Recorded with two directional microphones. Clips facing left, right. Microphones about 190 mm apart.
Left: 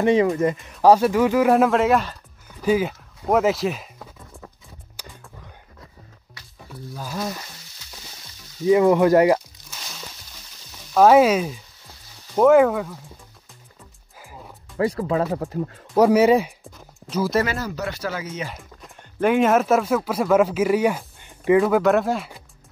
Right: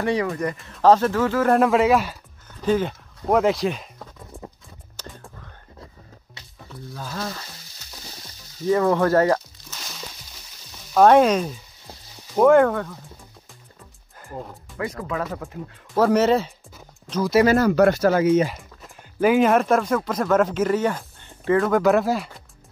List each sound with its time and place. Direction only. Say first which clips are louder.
0.0 s speech: left 5 dB; 20° left (ahead or behind)
1.5 s speech: even; centre (ahead or behind)
2.5 s speech: left 1 dB; 10° left (ahead or behind)
6.4 s music: left 1 dB; 25° right (ahead or behind)
6.7 s speech: left 2 dB; 10° left (ahead or behind)
8.6 s speech: left 4 dB; 15° left (ahead or behind)
10.9 s speech: left 1 dB; 5° left (ahead or behind)
14.8 s speech: left 6 dB; 30° left (ahead or behind)
15.9 s speech: left 3 dB; 15° left (ahead or behind)
17.6 s speech: right 12 dB; 60° right (ahead or behind)
18.5 s speech: even; centre (ahead or behind); by 21.7 s 15° left (ahead or behind)
21.7 s speech: even; centre (ahead or behind)